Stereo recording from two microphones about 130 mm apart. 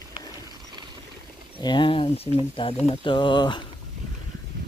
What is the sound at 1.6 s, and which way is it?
Speech, 35° left (ahead or behind).